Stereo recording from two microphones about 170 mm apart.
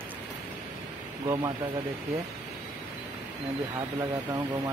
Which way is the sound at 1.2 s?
25° right (ahead or behind).